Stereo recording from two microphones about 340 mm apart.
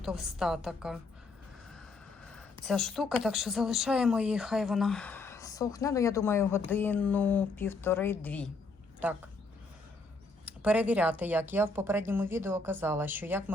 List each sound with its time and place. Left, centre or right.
0.0 s a woman's voice: centre
2.3 s a woman's voice: centre
10.4 s speech: centre